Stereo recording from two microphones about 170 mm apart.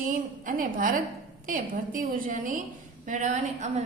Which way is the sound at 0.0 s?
55° right (ahead or behind).